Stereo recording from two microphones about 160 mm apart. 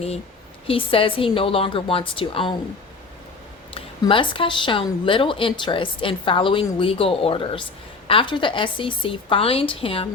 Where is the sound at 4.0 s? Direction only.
30° left (ahead or behind).